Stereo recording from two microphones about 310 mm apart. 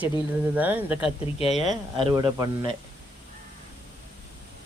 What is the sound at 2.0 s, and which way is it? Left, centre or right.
Speech, centre.